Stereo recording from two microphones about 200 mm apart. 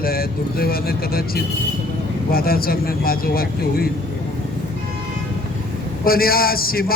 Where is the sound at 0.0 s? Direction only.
50° left (ahead or behind).